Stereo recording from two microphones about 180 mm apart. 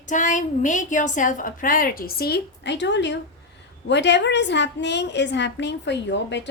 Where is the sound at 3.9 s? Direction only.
75° left (ahead or behind).